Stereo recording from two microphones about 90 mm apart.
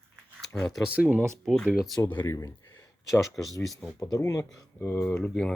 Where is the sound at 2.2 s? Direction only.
40° left (ahead or behind).